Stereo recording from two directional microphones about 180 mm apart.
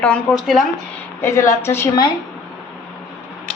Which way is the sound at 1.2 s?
15° left (ahead or behind).